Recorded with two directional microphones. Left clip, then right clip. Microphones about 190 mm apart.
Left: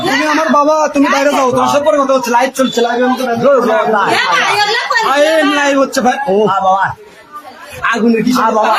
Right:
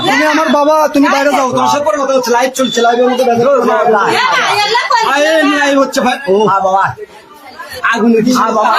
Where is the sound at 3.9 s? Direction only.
15° left (ahead or behind).